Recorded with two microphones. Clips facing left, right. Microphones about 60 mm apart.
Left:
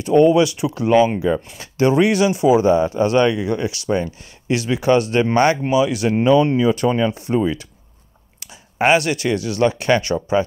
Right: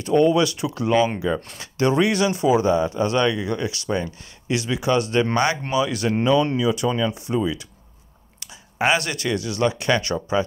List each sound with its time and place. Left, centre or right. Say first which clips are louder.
0.0 s speech: left 4 dB; left
5.6 s speech: left 5 dB; centre